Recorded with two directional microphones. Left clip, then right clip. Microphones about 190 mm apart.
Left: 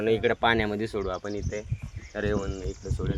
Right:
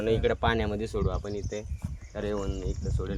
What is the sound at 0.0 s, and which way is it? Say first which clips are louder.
Speech: left 3 dB; 30° left (ahead or behind).